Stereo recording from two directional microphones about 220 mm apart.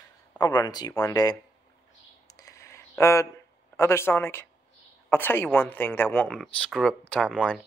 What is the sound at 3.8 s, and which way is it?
Speech, 10° left (ahead or behind).